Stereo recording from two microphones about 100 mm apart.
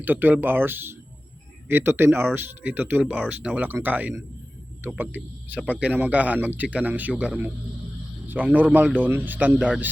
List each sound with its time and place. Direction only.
0.0 s speech: 20° right (ahead or behind)